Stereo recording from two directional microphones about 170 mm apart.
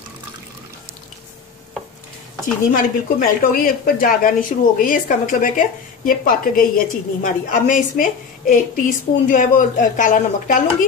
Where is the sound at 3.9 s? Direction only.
55° left (ahead or behind).